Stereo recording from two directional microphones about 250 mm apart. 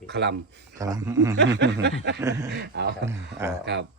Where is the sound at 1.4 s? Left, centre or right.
Right.